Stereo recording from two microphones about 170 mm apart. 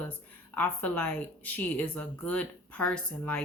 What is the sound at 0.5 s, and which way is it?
A woman's voice, 10° left (ahead or behind).